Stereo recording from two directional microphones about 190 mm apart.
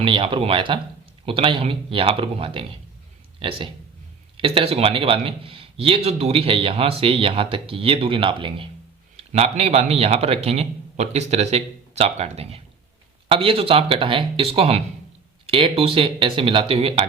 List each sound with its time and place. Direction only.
0.0 s a man's voice: 25° right (ahead or behind)